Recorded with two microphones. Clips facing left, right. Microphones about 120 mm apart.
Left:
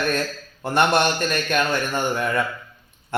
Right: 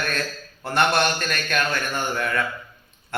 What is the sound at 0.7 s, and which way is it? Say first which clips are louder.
Speech: left 2 dB; 20° left (ahead or behind).